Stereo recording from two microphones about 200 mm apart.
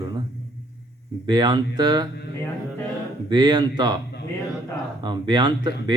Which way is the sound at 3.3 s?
20° right (ahead or behind).